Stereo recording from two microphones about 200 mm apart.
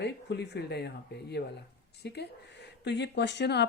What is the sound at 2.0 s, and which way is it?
Speech, 55° left (ahead or behind).